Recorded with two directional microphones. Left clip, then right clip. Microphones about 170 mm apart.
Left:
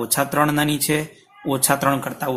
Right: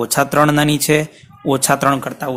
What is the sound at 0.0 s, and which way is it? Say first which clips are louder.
A man's voice: right 6 dB; 35° right (ahead or behind).